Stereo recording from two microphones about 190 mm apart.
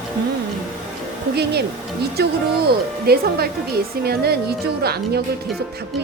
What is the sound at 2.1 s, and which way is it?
Speech, 55° right (ahead or behind).